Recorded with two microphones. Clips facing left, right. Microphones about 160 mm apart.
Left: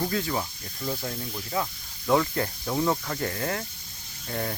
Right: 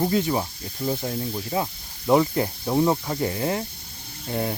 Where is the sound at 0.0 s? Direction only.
20° right (ahead or behind).